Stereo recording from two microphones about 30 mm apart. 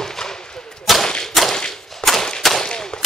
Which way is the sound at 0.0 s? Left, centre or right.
Centre.